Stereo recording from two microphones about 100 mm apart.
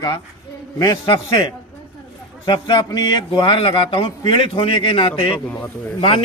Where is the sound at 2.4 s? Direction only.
45° left (ahead or behind); by 6.2 s 60° left (ahead or behind).